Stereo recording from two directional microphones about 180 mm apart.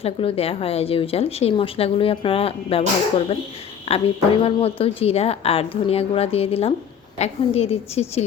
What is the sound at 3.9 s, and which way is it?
A woman's voice, 35° left (ahead or behind).